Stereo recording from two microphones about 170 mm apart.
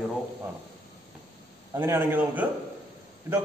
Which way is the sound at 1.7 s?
15° right (ahead or behind).